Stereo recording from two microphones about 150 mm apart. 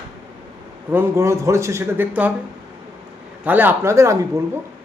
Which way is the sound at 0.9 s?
15° right (ahead or behind).